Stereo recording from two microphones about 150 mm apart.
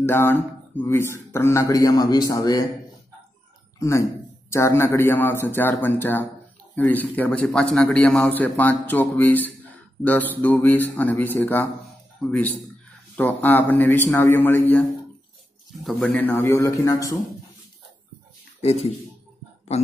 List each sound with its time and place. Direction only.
0.0 s speech: 15° left (ahead or behind)
3.8 s a man's voice: 20° left (ahead or behind)
15.8 s a man's voice: 5° left (ahead or behind); by 17.2 s 20° left (ahead or behind)
18.6 s speech: 45° left (ahead or behind)